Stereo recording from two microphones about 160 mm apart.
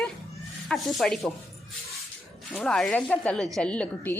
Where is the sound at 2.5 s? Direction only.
5° left (ahead or behind).